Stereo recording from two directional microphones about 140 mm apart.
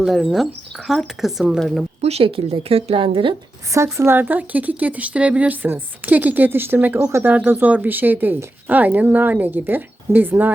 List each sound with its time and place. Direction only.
0.0 s speech: 5° right (ahead or behind)
2.0 s speech: 50° right (ahead or behind)
3.7 s speech: 20° right (ahead or behind)